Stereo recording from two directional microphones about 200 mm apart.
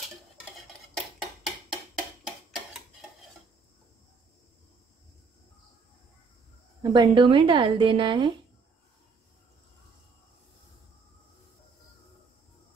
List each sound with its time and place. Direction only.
0.9 s a sound: centre (ahead or behind)
2.2 s tick-tock: centre (ahead or behind)
6.8 s speech: 20° right (ahead or behind)